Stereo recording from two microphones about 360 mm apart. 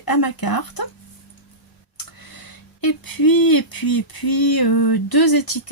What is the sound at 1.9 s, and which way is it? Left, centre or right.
Speech, left.